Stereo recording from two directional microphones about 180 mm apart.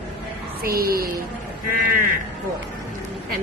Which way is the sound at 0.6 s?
55° right (ahead or behind).